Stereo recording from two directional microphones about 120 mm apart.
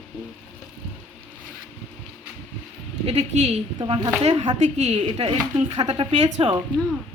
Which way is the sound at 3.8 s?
40° right (ahead or behind).